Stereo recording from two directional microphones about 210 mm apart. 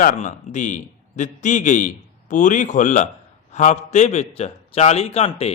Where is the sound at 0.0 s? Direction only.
40° left (ahead or behind).